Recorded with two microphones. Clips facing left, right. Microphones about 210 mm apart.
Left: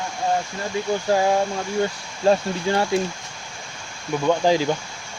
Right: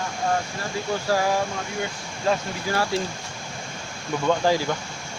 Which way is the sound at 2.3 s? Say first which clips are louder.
Left 5 dB; 25° left (ahead or behind).